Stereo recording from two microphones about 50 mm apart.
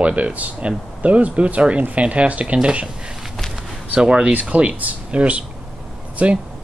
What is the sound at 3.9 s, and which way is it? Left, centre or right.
Speech, right.